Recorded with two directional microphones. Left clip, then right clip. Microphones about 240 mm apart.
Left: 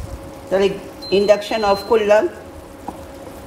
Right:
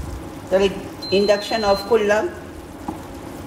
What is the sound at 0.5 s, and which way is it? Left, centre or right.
Speech, left.